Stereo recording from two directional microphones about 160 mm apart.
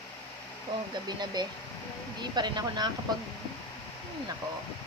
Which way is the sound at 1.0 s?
25° right (ahead or behind).